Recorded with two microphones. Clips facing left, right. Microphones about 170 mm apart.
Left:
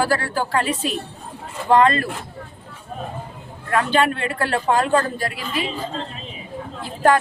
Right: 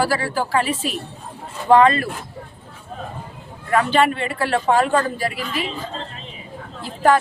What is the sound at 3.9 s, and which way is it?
Speech, centre (ahead or behind).